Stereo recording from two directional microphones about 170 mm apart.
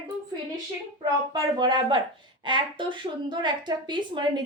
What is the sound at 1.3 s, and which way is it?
A woman's voice, 25° right (ahead or behind).